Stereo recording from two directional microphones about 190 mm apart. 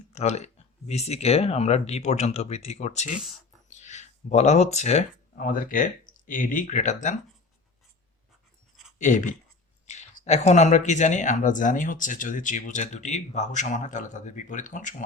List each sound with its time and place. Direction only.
0.1 s speech: 35° left (ahead or behind)
9.0 s speech: 40° left (ahead or behind)